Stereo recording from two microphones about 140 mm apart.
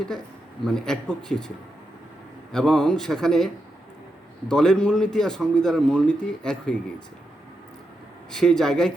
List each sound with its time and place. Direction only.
0.6 s a man's voice: 5° left (ahead or behind)
2.5 s a man's voice: 5° left (ahead or behind)
8.3 s a man's voice: 5° left (ahead or behind)